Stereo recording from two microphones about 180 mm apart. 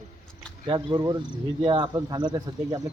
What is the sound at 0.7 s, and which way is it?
Speech, 20° right (ahead or behind).